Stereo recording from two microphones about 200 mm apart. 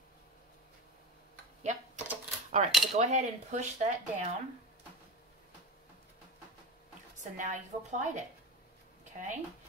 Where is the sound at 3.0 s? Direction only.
35° right (ahead or behind).